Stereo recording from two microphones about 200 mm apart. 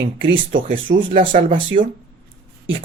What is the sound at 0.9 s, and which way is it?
Speech, 45° right (ahead or behind).